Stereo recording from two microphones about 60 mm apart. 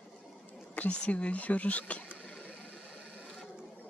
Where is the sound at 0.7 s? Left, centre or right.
Left.